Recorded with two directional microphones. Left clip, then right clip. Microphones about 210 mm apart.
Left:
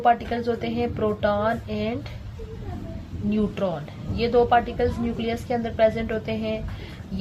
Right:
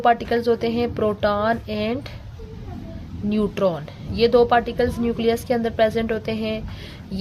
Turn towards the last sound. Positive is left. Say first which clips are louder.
# right 3 dB
turn(degrees=-55)  # may be behind; listen again after turning